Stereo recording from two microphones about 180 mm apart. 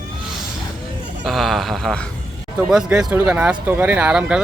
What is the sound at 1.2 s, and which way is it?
Speech, centre (ahead or behind).